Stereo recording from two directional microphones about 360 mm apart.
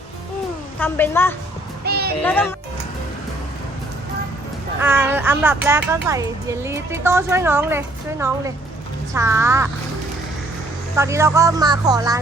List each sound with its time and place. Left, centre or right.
0.8 s a woman's voice: centre
1.8 s a sound: right
2.2 s a woman's voice: centre
4.8 s speech: centre
10.9 s speech: centre